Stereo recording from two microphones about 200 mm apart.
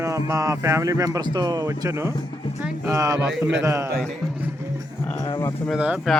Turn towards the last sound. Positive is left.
turn(degrees=-5)  # may be behind; listen again after turning